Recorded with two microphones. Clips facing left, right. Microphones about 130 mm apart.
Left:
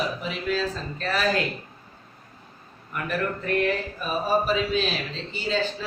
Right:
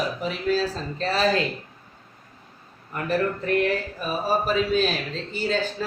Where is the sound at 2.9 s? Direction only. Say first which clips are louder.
Right 1 dB; 30° right (ahead or behind).